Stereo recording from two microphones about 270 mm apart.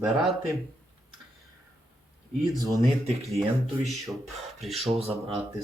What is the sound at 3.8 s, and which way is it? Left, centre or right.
Speech, centre.